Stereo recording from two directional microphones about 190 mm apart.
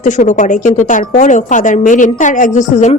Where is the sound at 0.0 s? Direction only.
40° left (ahead or behind).